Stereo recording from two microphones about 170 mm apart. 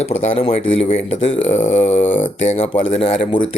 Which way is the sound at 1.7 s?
90° left.